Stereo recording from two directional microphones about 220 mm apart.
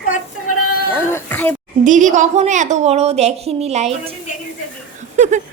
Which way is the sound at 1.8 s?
35° right (ahead or behind).